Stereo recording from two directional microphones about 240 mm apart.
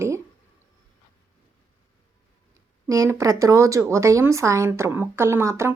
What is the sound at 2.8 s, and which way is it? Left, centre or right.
A woman's voice, centre.